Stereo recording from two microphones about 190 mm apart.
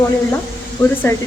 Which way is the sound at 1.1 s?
15° left (ahead or behind).